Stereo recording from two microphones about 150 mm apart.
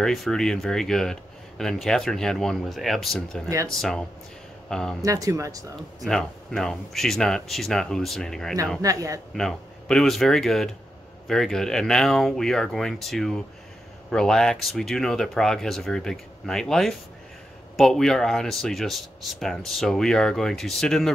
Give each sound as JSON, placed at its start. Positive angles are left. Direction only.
{"t": 0.0, "sound": "speech", "side_deg": 0}
{"t": 3.4, "sound": "speech", "side_deg": -20}
{"t": 4.6, "sound": "speech", "side_deg": 5}
{"t": 5.0, "sound": "speech", "side_deg": -20}
{"t": 6.0, "sound": "speech", "side_deg": 5}
{"t": 8.8, "sound": "speech", "side_deg": -20}
{"t": 9.3, "sound": "speech", "side_deg": 0}